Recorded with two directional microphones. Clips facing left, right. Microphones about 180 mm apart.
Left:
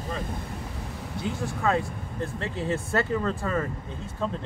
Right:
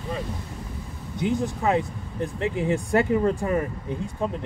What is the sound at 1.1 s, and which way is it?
Speech, 20° right (ahead or behind).